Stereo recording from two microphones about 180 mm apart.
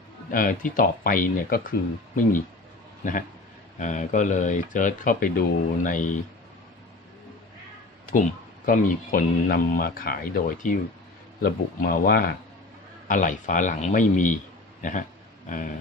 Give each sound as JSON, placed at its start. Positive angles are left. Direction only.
{"t": 0.3, "sound": "speech", "side_deg": 50}
{"t": 3.0, "sound": "a man's voice", "side_deg": 50}
{"t": 8.1, "sound": "speech", "side_deg": 45}
{"t": 15.4, "sound": "a sound", "side_deg": 45}